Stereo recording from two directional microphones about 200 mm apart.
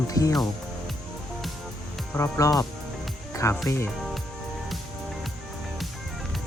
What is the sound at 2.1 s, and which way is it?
Speech, 15° left (ahead or behind).